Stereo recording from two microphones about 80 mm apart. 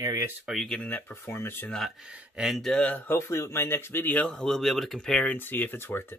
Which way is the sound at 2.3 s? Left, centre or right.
Centre.